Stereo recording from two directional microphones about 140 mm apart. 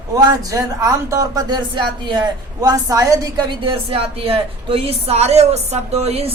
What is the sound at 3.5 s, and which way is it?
A woman's voice, 35° right (ahead or behind).